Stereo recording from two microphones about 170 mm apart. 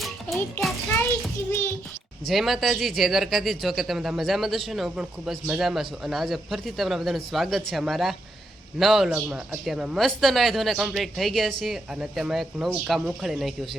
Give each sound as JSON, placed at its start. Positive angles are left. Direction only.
{"t": 1.5, "sound": "a child's voice", "side_deg": 15}
{"t": 2.2, "sound": "a man's voice", "side_deg": 0}